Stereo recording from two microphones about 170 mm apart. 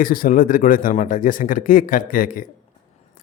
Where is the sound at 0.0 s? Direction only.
55° left (ahead or behind).